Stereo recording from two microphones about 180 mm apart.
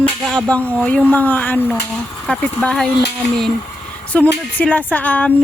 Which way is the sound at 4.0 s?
10° left (ahead or behind).